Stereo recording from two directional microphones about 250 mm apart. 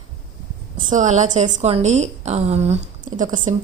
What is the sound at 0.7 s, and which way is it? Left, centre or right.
A woman's voice, right.